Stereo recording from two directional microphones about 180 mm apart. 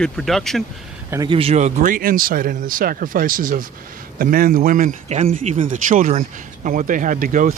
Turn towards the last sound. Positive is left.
turn(degrees=-50)  # may be behind; listen again after turning